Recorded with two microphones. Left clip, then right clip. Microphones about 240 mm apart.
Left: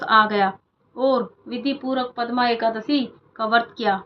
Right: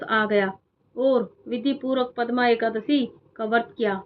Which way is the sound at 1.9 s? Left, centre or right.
Left.